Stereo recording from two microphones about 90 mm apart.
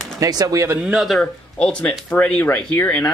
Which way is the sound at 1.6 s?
15° left (ahead or behind).